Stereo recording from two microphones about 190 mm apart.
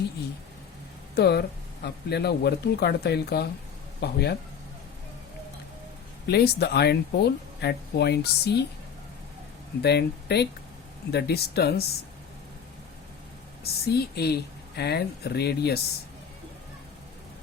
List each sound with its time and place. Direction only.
1.1 s speech: 60° left (ahead or behind)
6.2 s speech: 60° left (ahead or behind)
9.8 s speech: 60° left (ahead or behind)
13.8 s speech: 55° left (ahead or behind)